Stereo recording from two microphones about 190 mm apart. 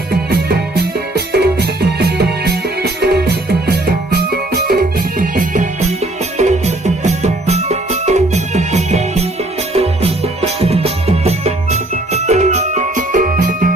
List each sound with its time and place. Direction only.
0.3 s music: 60° right (ahead or behind)